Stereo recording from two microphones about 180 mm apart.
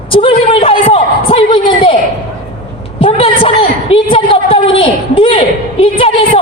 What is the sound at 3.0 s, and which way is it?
A woman's voice, 30° left (ahead or behind).